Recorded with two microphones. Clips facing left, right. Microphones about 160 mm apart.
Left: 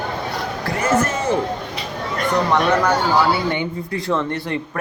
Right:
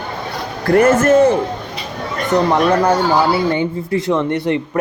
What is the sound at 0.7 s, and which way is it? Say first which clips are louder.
Speech: right 9 dB; 55° right (ahead or behind).